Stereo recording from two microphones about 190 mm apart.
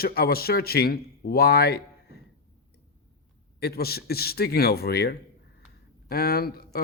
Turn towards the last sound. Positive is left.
turn(degrees=55)  # may be behind; listen again after turning